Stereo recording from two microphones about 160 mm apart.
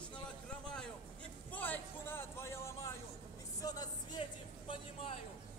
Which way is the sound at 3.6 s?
25° left (ahead or behind).